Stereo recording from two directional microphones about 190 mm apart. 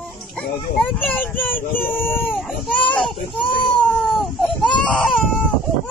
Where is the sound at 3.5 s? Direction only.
25° left (ahead or behind).